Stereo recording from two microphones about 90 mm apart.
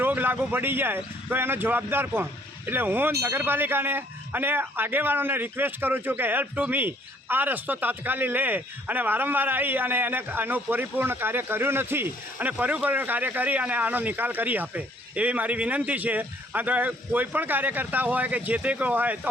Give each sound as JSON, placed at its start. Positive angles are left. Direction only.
{"t": 0.0, "sound": "speech", "side_deg": -20}